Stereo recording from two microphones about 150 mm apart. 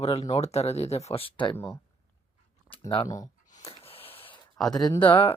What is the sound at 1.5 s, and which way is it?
Speech, 15° left (ahead or behind).